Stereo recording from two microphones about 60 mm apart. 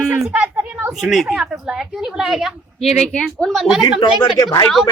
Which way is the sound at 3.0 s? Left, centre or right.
Centre.